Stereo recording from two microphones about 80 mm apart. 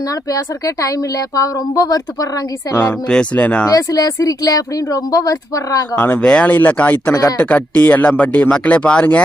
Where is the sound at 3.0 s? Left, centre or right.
Centre.